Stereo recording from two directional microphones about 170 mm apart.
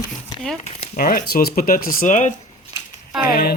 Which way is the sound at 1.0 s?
60° left (ahead or behind).